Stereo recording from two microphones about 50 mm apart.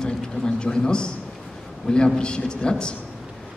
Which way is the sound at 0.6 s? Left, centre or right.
Centre.